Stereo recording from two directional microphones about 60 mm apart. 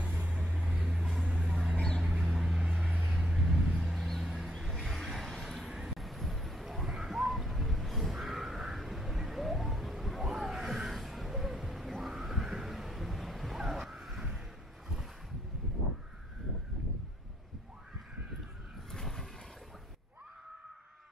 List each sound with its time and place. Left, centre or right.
0.6 s vehicle: right
0.8 s vehicle: centre
3.2 s vehicle: centre
5.4 s a sound: centre
18.9 s vehicle: centre